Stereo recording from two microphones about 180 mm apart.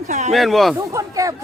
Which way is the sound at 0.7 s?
15° right (ahead or behind).